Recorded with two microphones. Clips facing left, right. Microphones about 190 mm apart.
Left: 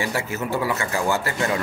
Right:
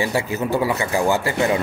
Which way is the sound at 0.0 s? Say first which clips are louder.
Right 4 dB; 20° right (ahead or behind).